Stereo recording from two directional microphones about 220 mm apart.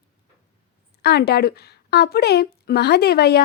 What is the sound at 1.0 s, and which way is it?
A woman's voice, 45° left (ahead or behind).